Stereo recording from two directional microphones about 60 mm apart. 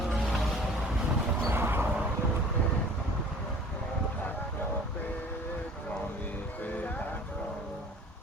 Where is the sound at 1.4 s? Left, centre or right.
Right.